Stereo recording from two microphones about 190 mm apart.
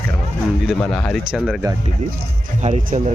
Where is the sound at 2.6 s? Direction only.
35° right (ahead or behind).